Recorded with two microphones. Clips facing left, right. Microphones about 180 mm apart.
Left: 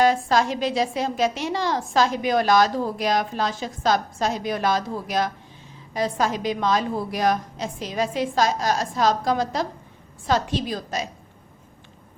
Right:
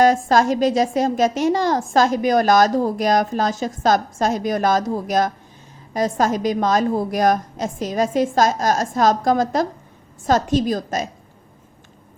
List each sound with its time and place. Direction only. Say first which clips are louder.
0.0 s a woman's voice: right 4 dB; 45° right (ahead or behind)